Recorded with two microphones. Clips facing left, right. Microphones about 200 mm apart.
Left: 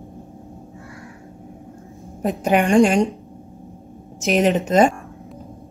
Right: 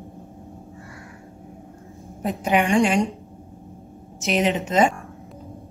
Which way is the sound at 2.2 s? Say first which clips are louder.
Left 3 dB; 45° left (ahead or behind).